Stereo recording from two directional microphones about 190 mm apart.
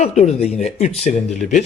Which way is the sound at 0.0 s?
35° left (ahead or behind).